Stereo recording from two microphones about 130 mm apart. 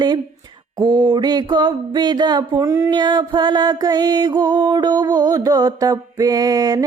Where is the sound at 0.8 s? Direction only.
35° right (ahead or behind).